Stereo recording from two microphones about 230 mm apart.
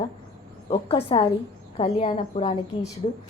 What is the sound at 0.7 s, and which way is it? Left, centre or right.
A woman's voice, left.